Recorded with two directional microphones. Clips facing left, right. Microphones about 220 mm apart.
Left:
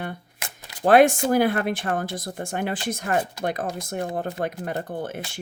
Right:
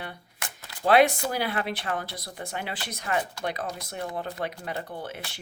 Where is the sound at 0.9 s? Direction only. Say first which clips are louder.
Left 5 dB; 50° left (ahead or behind).